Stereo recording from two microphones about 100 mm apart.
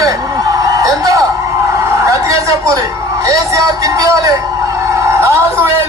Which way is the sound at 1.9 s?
30° right (ahead or behind).